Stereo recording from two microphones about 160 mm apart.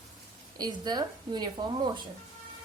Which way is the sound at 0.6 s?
25° right (ahead or behind).